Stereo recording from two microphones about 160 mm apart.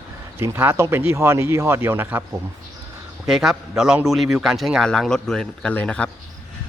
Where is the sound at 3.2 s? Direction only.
Centre (ahead or behind).